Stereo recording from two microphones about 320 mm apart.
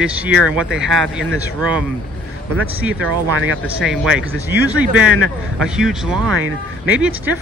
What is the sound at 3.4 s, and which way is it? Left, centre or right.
Speech, right.